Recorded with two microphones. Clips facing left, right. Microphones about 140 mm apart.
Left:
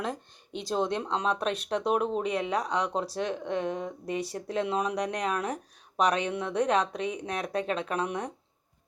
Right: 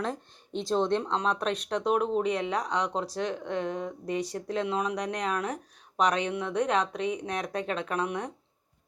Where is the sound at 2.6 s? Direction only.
10° left (ahead or behind).